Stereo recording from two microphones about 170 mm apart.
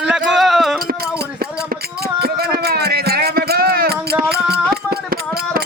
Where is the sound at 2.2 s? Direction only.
65° right (ahead or behind).